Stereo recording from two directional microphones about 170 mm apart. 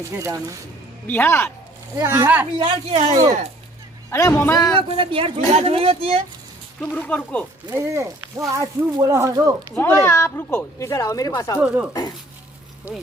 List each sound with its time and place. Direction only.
0.2 s speech: 20° right (ahead or behind)
1.0 s speech: 10° left (ahead or behind)
2.0 s speech: 15° right (ahead or behind)
2.6 s speech: 30° right (ahead or behind)
4.1 s speech: 15° left (ahead or behind)
4.8 s speech: 30° right (ahead or behind)
6.8 s speech: 5° left (ahead or behind)
7.7 s speech: 15° right (ahead or behind)
9.7 s speech: 15° left (ahead or behind)
11.6 s speech: 5° right (ahead or behind)